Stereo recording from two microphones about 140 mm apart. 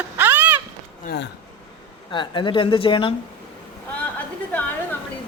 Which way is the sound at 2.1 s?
35° left (ahead or behind).